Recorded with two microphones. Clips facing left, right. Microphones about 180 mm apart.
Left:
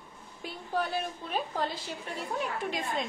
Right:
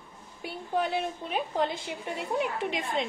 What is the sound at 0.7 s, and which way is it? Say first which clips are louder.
A woman's voice: right 3 dB; 20° right (ahead or behind).